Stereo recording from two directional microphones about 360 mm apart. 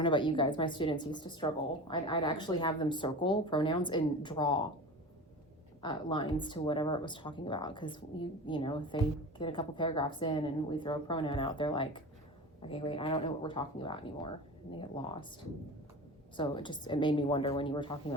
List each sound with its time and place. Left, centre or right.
0.0 s speech: centre
5.8 s speech: centre
16.4 s speech: centre